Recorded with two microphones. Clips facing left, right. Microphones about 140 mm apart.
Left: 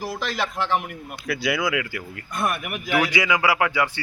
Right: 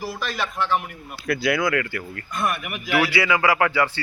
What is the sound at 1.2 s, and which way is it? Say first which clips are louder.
Speech: right 3 dB; centre (ahead or behind).